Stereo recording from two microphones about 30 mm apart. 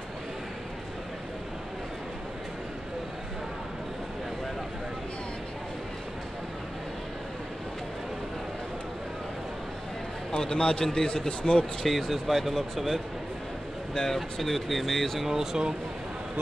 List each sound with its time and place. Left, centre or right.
10.4 s a man's voice: left
10.9 s a man's voice: centre
11.8 s speech: centre
12.1 s speech: centre
13.9 s speech: centre
14.4 s speech: centre
15.2 s speech: centre